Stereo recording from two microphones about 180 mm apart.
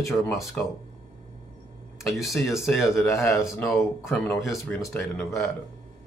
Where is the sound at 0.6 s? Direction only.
10° left (ahead or behind).